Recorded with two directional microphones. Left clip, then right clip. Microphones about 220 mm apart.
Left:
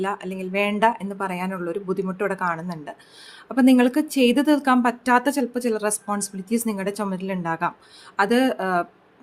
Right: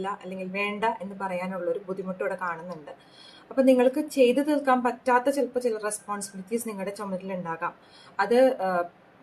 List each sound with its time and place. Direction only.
0.0 s a woman's voice: 45° left (ahead or behind)